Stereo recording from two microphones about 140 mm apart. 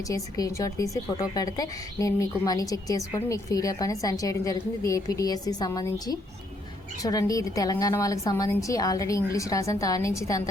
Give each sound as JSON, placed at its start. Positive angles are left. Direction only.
{"t": 0.1, "sound": "a woman's voice", "side_deg": 25}